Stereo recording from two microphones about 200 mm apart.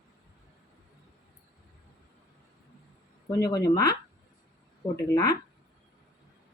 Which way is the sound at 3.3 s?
15° left (ahead or behind).